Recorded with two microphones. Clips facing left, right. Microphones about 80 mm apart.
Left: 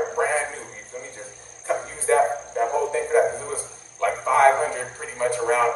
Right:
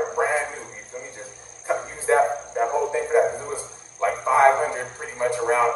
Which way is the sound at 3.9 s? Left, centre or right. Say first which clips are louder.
Even; centre.